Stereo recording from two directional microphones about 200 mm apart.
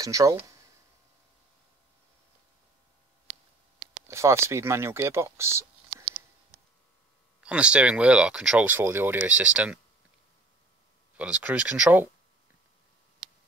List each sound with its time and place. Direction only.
0.0 s speech: 15° right (ahead or behind)
4.1 s speech: 15° right (ahead or behind)
7.4 s speech: 5° right (ahead or behind)
11.1 s speech: 5° right (ahead or behind)